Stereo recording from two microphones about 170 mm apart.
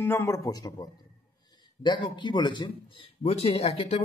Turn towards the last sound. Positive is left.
turn(degrees=40)  # may be behind; listen again after turning